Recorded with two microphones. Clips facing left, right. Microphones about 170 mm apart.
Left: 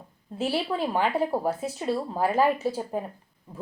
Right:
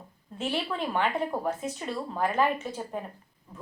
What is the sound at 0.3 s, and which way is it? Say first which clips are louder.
Speech: left 4 dB; 35° left (ahead or behind).